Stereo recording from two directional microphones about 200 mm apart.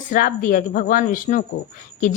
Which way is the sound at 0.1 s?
40° left (ahead or behind).